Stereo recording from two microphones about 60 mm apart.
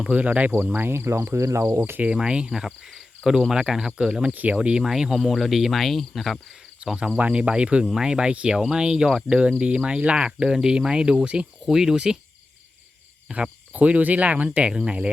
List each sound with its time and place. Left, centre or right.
0.0 s cricket: right
0.5 s speech: right
2.0 s speech: centre
4.3 s cricket: right
4.8 s cricket: centre
6.8 s speech: centre
13.2 s cricket: centre